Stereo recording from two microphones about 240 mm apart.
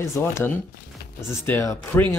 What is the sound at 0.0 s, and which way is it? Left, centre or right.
Speech, centre.